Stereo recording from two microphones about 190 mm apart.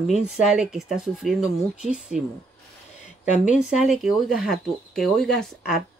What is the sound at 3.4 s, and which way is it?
Speech, 5° right (ahead or behind).